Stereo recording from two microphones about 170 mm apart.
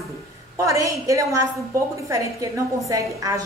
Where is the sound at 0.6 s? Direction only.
20° right (ahead or behind).